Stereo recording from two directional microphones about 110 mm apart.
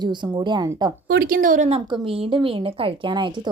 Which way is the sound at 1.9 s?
50° right (ahead or behind).